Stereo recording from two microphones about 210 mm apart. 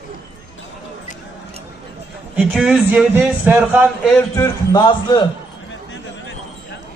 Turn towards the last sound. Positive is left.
turn(degrees=20)  # may be behind; listen again after turning